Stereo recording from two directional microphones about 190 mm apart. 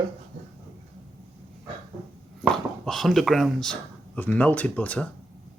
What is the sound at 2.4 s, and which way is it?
Speech, centre (ahead or behind).